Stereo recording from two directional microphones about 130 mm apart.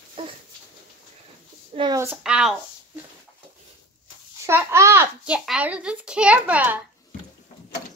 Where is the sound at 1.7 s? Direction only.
60° right (ahead or behind).